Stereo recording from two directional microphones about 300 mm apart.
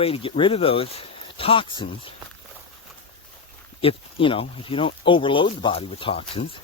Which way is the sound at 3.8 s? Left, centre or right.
Centre.